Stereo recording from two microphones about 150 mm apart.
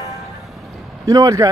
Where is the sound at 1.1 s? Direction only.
25° right (ahead or behind).